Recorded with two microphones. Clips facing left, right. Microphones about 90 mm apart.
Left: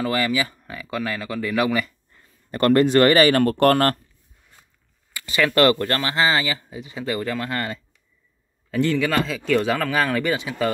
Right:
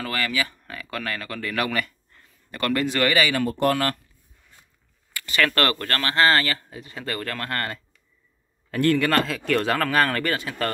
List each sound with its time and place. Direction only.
0.0 s speech: 20° left (ahead or behind)
2.5 s speech: 35° left (ahead or behind)
3.3 s speech: 65° left (ahead or behind)
3.7 s speech: 45° left (ahead or behind)
5.1 s speech: 15° left (ahead or behind)
8.7 s a man's voice: 10° right (ahead or behind)